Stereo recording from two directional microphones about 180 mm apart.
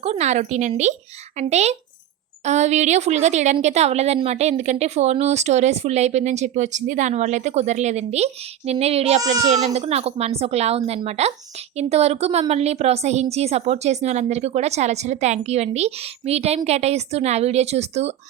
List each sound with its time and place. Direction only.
0.0 s speech: 35° right (ahead or behind)